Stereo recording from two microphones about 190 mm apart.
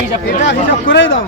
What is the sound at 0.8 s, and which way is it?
Speech, 70° left (ahead or behind).